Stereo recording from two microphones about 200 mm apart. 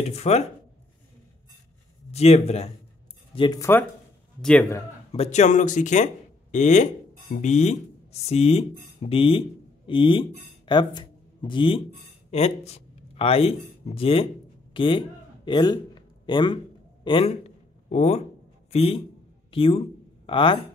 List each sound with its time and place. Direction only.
0.0 s speech: 30° left (ahead or behind)
2.0 s speech: 30° left (ahead or behind)
3.3 s a man's voice: 20° left (ahead or behind)
5.1 s speech: 35° left (ahead or behind)
14.7 s a sound: 25° left (ahead or behind)
18.7 s a man's voice: 30° left (ahead or behind)